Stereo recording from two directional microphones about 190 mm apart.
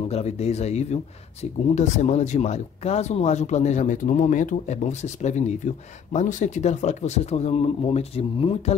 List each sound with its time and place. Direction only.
0.1 s speech: 35° left (ahead or behind)